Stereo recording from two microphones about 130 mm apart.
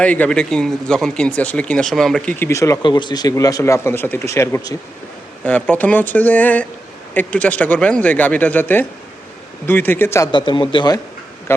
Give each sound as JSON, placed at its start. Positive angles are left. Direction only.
{"t": 0.0, "sound": "speech", "side_deg": 10}
{"t": 2.4, "sound": "speech", "side_deg": 25}
{"t": 2.8, "sound": "speech", "side_deg": 35}
{"t": 10.3, "sound": "a man's voice", "side_deg": 35}